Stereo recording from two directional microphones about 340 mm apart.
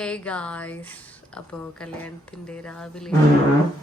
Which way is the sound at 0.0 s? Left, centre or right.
Centre.